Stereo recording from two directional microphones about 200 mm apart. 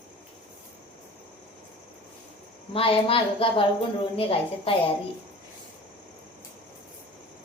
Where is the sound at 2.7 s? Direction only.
25° left (ahead or behind).